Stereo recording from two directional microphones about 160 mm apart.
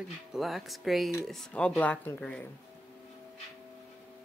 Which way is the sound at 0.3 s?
Centre (ahead or behind).